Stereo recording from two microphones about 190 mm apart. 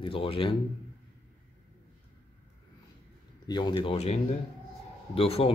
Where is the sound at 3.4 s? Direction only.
20° left (ahead or behind).